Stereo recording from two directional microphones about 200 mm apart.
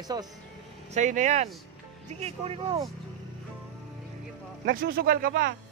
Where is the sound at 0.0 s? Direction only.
20° right (ahead or behind).